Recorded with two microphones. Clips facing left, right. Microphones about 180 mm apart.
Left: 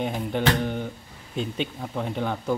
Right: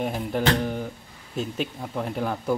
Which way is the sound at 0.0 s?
Centre (ahead or behind).